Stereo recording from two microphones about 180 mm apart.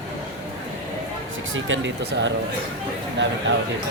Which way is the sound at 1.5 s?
90° right.